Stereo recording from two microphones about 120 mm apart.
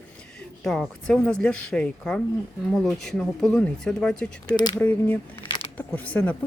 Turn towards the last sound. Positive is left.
turn(degrees=15)  # may be behind; listen again after turning